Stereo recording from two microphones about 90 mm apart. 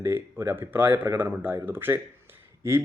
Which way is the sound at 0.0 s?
25° right (ahead or behind).